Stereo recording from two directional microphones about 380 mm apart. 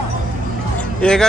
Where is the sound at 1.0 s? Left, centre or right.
Centre.